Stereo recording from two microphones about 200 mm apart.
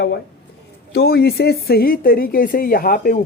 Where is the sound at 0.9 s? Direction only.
50° left (ahead or behind).